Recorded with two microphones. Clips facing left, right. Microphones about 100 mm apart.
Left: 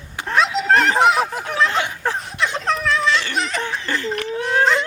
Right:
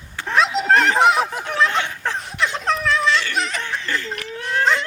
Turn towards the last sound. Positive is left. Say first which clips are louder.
# left 2 dB
turn(degrees=0)  # may be behind; listen again after turning